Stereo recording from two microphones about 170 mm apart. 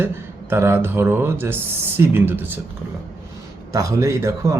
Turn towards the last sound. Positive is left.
turn(degrees=-20)  # may be behind; listen again after turning